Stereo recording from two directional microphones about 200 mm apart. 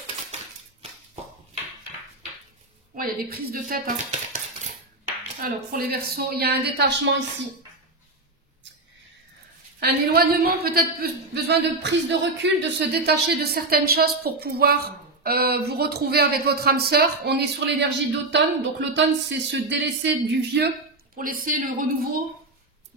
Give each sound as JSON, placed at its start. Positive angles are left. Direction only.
{"t": 3.0, "sound": "a man's voice", "side_deg": -45}
{"t": 5.4, "sound": "a man's voice", "side_deg": -50}
{"t": 9.8, "sound": "a man's voice", "side_deg": -50}
{"t": 21.2, "sound": "a man's voice", "side_deg": -45}